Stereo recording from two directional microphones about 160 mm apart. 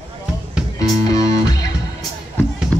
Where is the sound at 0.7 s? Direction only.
25° left (ahead or behind).